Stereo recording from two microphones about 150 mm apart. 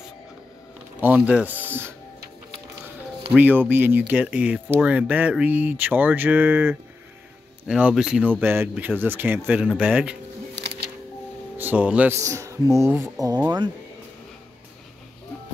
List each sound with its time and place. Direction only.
1.0 s speech: 10° right (ahead or behind)
3.3 s speech: 10° right (ahead or behind)
11.5 s speech: 10° right (ahead or behind)
12.2 s speech: 20° right (ahead or behind)